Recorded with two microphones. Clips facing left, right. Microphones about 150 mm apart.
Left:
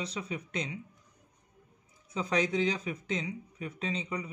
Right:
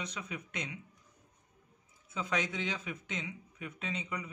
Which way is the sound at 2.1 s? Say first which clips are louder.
Left 6 dB; 35° left (ahead or behind).